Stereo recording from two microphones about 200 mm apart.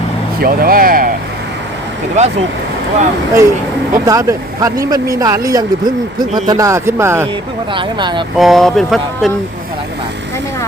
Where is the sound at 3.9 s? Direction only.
15° right (ahead or behind).